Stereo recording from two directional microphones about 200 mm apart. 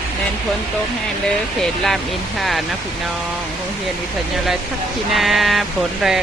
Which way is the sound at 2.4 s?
Centre (ahead or behind).